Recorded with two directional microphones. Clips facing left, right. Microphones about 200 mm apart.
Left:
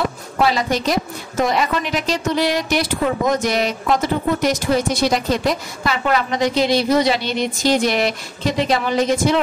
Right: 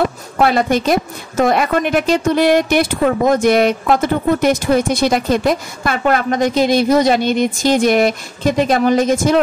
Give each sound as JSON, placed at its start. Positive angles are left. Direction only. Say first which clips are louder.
{"t": 0.4, "sound": "a woman's voice", "louder": "right 4 dB", "side_deg": -55}